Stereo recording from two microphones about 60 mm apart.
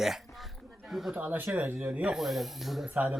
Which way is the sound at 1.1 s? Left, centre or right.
Right.